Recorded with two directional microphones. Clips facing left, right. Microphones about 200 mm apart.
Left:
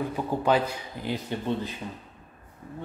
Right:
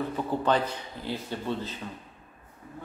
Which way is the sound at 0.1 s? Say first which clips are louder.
Left 2 dB; 10° left (ahead or behind).